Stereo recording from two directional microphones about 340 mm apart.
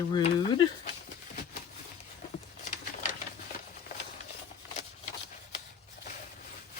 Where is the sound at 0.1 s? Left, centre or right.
Centre.